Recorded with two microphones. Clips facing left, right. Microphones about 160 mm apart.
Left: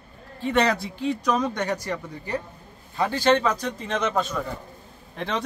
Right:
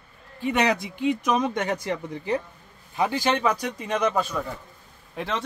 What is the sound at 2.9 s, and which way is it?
Speech, 15° right (ahead or behind).